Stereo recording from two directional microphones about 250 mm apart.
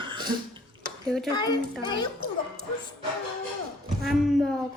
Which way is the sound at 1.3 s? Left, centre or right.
Centre.